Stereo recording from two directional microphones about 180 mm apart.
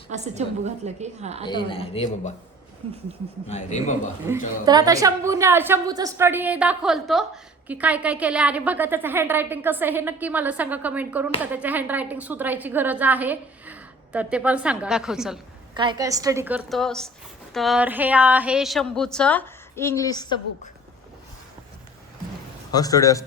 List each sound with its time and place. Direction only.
0.1 s a woman's voice: 40° right (ahead or behind)
1.5 s a woman's voice: 25° left (ahead or behind)
3.5 s a man's voice: 40° left (ahead or behind)
4.6 s a woman's voice: 20° right (ahead or behind); by 15.4 s 5° right (ahead or behind)
15.7 s a woman's voice: 25° right (ahead or behind); by 20.4 s 20° left (ahead or behind)
22.7 s a man's voice: 20° left (ahead or behind)